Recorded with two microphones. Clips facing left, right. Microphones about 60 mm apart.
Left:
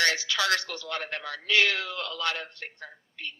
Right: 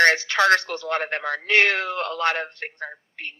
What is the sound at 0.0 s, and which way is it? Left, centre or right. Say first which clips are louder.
Speech: right 9 dB; right.